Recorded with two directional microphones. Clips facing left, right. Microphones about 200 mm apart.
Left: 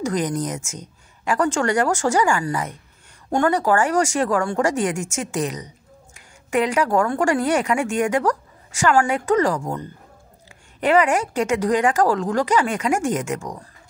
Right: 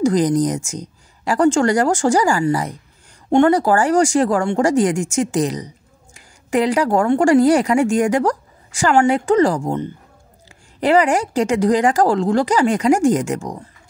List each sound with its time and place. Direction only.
0.0 s a woman's voice: 30° right (ahead or behind)